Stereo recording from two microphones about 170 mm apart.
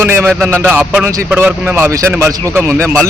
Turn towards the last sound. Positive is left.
turn(degrees=-15)  # may be behind; listen again after turning